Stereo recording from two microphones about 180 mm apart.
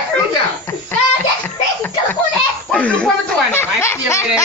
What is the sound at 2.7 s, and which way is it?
Speech, 5° left (ahead or behind).